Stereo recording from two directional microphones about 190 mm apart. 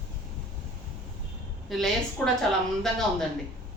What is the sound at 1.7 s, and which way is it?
A woman's voice, centre (ahead or behind).